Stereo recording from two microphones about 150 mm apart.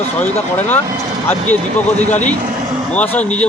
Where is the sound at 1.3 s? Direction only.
10° left (ahead or behind).